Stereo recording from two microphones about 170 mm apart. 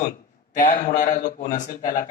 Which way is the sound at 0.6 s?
45° left (ahead or behind).